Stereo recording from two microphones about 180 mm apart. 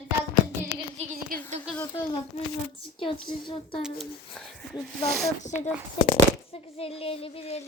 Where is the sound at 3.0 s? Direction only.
30° left (ahead or behind).